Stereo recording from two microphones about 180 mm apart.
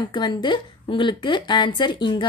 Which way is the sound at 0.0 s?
25° left (ahead or behind).